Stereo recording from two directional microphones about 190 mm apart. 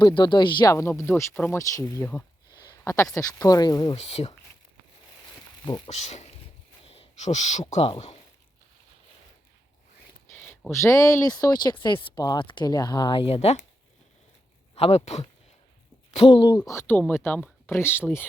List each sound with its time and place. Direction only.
0.0 s speech: 25° left (ahead or behind)
2.6 s a sound: 15° left (ahead or behind)
3.2 s speech: 15° left (ahead or behind)
3.9 s speech: 35° left (ahead or behind)
5.6 s speech: 25° left (ahead or behind)
10.3 s a sound: 10° left (ahead or behind)
10.7 s speech: 15° left (ahead or behind); by 13.6 s 30° left (ahead or behind)
14.8 s speech: 35° left (ahead or behind); by 18.3 s 10° left (ahead or behind)